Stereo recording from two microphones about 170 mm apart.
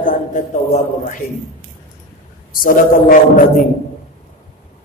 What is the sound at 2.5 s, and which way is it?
Speech, 55° left (ahead or behind).